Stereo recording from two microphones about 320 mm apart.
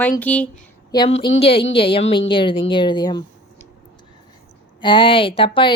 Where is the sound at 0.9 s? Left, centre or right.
Centre.